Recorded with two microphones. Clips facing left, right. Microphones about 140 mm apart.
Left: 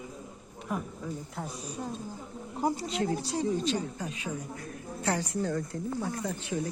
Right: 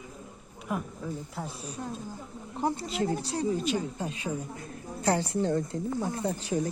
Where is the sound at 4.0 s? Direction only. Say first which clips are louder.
Right 3 dB; 30° right (ahead or behind).